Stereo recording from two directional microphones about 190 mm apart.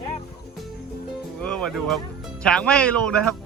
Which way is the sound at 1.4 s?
5° left (ahead or behind).